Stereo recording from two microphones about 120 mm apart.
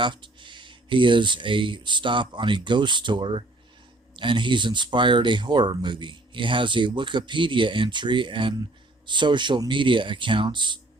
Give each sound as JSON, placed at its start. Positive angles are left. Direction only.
{"t": 0.0, "sound": "speech", "side_deg": -40}